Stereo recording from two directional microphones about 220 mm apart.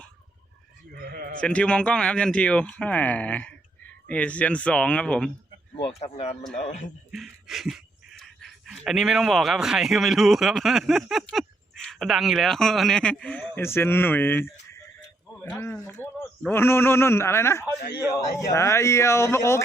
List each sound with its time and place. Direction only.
0.9 s sheep: 40° right (ahead or behind)
1.4 s speech: 5° left (ahead or behind)
6.0 s speech: 30° left (ahead or behind)
7.1 s a man's voice: centre (ahead or behind)